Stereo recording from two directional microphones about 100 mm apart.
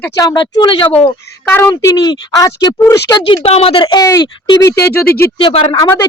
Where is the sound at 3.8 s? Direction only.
45° left (ahead or behind).